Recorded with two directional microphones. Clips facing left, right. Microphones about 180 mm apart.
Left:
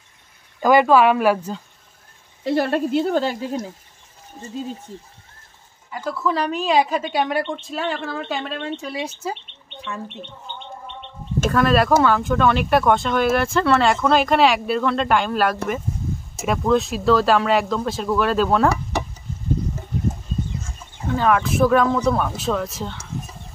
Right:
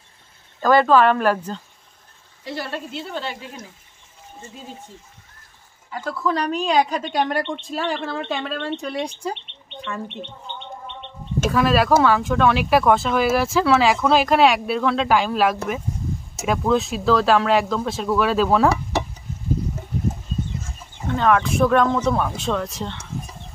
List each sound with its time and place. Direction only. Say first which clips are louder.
0.6 s speech: left 1 dB; 10° left (ahead or behind)
2.5 s speech: left 10 dB; 55° left (ahead or behind)
6.0 s speech: left 1 dB; 5° left (ahead or behind)
11.4 s speech: left 1 dB; centre (ahead or behind)
21.1 s speech: even; centre (ahead or behind)